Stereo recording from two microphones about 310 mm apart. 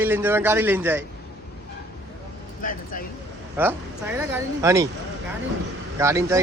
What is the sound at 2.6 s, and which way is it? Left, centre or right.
Speech, left.